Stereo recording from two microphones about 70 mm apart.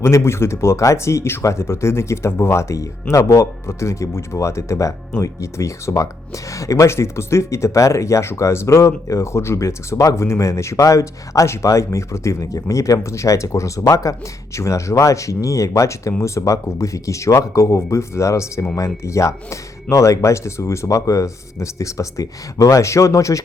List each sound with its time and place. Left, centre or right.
0.0 s speech: left